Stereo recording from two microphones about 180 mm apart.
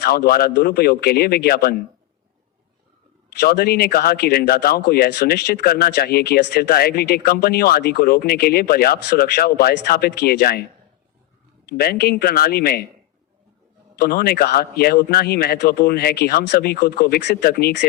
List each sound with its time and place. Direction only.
0.0 s speech: 60° left (ahead or behind)
3.4 s speech: 55° left (ahead or behind)
11.8 s speech: 60° left (ahead or behind)
14.0 s speech: 55° left (ahead or behind)